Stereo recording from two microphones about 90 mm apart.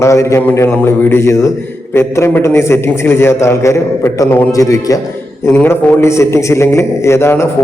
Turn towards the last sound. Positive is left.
turn(degrees=30)  # may be behind; listen again after turning